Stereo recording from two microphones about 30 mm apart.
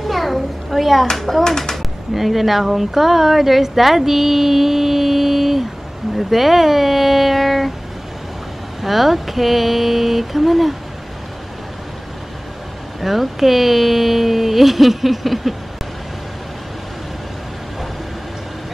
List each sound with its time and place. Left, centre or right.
0.0 s a sound: centre
1.1 s speech: centre
2.1 s speech: centre
8.8 s speech: centre
13.0 s speech: centre